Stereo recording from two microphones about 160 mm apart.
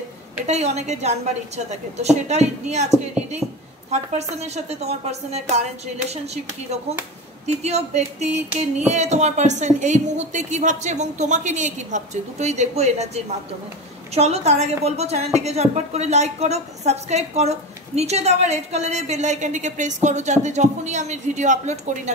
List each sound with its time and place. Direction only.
0.5 s a woman's voice: 45° right (ahead or behind)
3.9 s a woman's voice: 45° right (ahead or behind)